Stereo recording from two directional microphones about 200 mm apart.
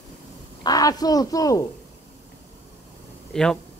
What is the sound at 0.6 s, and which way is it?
A man's voice, 20° left (ahead or behind).